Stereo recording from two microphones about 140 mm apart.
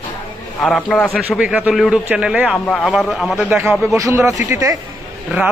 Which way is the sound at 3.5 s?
10° right (ahead or behind).